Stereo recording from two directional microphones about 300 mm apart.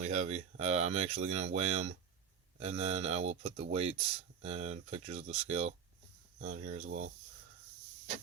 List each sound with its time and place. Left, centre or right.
0.0 s speech: right